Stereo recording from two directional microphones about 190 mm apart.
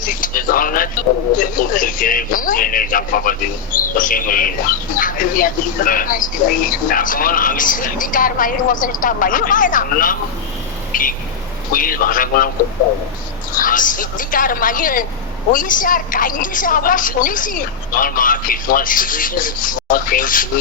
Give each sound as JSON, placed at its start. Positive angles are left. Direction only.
{"t": 0.0, "sound": "speech", "side_deg": 45}
{"t": 13.6, "sound": "speech", "side_deg": 45}